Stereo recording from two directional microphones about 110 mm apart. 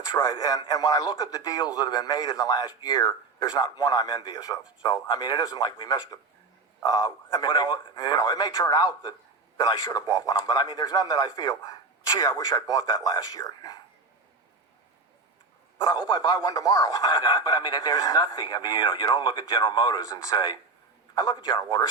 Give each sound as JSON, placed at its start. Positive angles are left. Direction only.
{"t": 0.0, "sound": "radio", "side_deg": 35}
{"t": 0.6, "sound": "a man's voice", "side_deg": 40}
{"t": 16.0, "sound": "a man's voice", "side_deg": 45}